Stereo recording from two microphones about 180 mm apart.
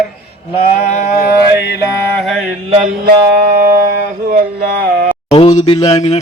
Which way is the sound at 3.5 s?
55° right (ahead or behind).